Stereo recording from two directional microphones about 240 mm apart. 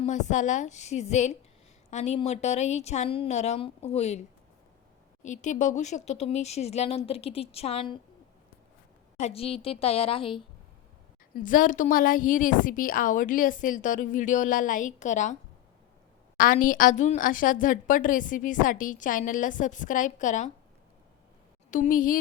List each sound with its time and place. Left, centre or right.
0.0 s speech: left
5.2 s speech: left
9.1 s speech: left
11.3 s a woman's voice: left
16.4 s a woman's voice: left
21.7 s a woman's voice: left